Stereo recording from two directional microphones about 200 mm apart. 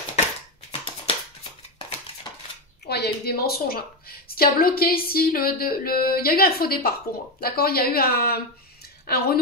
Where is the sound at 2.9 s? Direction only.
55° left (ahead or behind).